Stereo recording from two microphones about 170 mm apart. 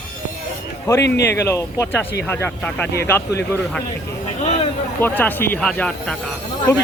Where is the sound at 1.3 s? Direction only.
15° left (ahead or behind).